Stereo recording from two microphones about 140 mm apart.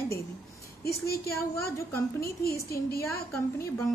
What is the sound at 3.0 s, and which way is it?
Speech, 20° left (ahead or behind).